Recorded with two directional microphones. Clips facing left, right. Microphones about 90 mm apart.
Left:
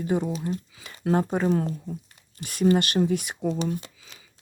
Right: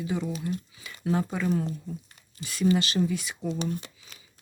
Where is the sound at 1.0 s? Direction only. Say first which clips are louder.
Left 4 dB; 50° left (ahead or behind).